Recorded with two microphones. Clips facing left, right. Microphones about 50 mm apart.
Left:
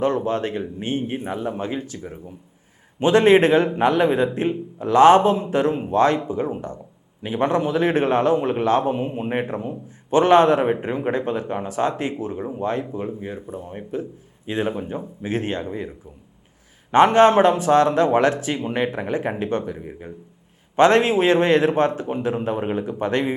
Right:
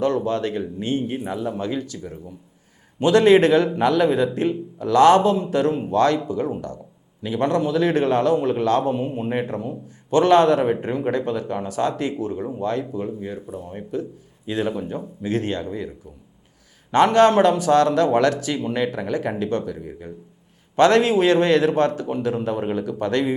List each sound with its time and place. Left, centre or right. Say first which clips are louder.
0.0 s a man's voice: even; left